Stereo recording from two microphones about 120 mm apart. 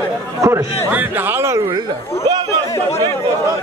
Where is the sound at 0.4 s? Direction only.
20° right (ahead or behind).